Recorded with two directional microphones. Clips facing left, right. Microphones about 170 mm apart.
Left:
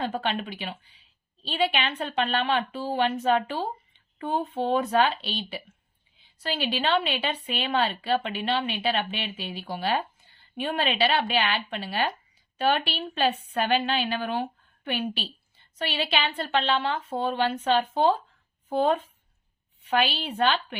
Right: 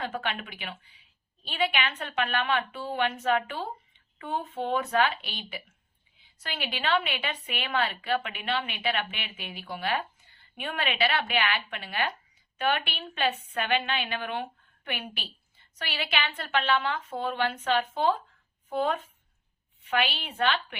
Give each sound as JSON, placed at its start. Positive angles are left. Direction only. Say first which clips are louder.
{"t": 0.0, "sound": "a woman's voice", "louder": "left 4 dB", "side_deg": 30}